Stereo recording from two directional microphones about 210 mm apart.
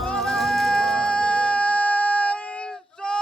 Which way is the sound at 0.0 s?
Centre (ahead or behind).